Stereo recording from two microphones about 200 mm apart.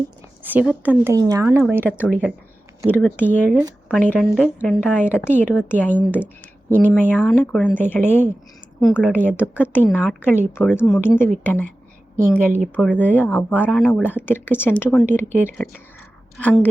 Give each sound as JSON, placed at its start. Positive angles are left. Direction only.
{"t": 0.4, "sound": "speech", "side_deg": -10}
{"t": 1.8, "sound": "a woman's voice", "side_deg": 10}
{"t": 6.9, "sound": "a woman's voice", "side_deg": 5}
{"t": 8.8, "sound": "speech", "side_deg": 0}
{"t": 9.1, "sound": "a woman's voice", "side_deg": 10}
{"t": 12.1, "sound": "a woman's voice", "side_deg": -45}
{"t": 12.4, "sound": "speech", "side_deg": -10}
{"t": 12.7, "sound": "a woman's voice", "side_deg": 5}